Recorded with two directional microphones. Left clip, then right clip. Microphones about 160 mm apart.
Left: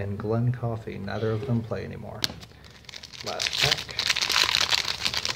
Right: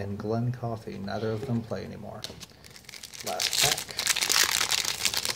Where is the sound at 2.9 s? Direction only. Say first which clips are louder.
Left 1 dB; 25° right (ahead or behind).